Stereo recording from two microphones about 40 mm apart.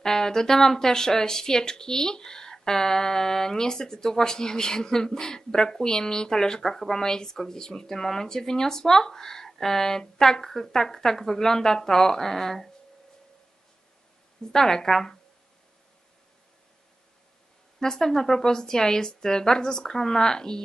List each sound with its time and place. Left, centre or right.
0.0 s speech: centre
14.4 s speech: centre
17.7 s speech: centre